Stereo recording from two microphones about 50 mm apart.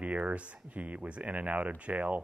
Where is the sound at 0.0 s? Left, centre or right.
Right.